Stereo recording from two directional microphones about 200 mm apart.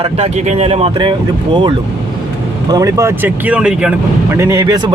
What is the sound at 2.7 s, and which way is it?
Speech, 15° right (ahead or behind).